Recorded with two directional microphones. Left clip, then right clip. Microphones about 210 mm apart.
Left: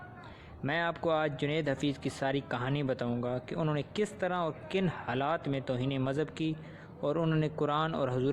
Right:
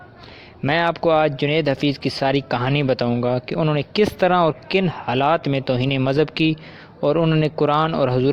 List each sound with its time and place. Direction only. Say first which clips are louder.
0.6 s speech: right 13 dB; 40° right (ahead or behind)